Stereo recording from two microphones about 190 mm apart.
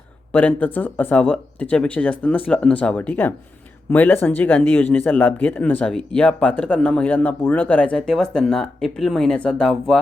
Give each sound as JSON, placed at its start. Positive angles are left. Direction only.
{"t": 0.3, "sound": "speech", "side_deg": 10}